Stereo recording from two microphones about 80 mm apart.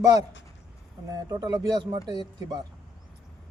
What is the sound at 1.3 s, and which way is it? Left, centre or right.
Speech, right.